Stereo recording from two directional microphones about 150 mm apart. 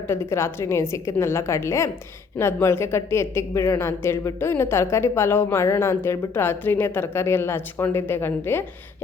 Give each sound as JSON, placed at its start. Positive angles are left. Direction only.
{"t": 0.1, "sound": "a woman's voice", "side_deg": 20}